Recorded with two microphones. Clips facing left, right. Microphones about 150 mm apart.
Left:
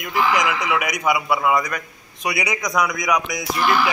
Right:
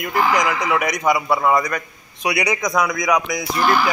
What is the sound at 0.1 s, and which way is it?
Speech, 40° right (ahead or behind).